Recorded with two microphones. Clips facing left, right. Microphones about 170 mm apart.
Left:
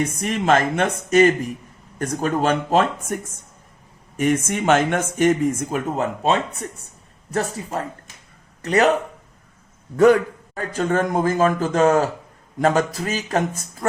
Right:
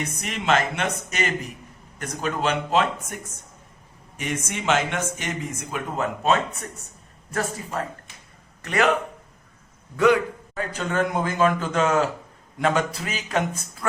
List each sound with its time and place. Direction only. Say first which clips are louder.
0.0 s speech: left 7 dB; 45° left (ahead or behind)
4.2 s speech: left 9 dB; 50° left (ahead or behind)
6.0 s a man's voice: even; 30° left (ahead or behind)
10.0 s a man's voice: left 5 dB; 45° left (ahead or behind)